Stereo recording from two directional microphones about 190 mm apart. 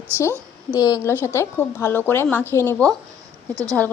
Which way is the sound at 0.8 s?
20° left (ahead or behind).